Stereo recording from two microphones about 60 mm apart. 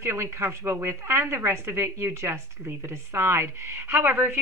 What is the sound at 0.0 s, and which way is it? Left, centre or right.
A woman's voice, right.